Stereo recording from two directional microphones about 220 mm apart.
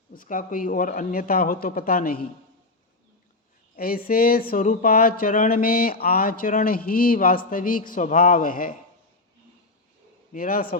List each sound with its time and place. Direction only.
0.2 s speech: 40° left (ahead or behind)
3.8 s speech: 40° left (ahead or behind)
10.3 s speech: 40° left (ahead or behind)